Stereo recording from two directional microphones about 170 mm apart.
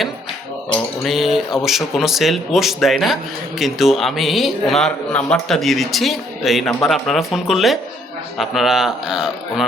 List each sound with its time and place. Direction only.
1.0 s speech: centre (ahead or behind)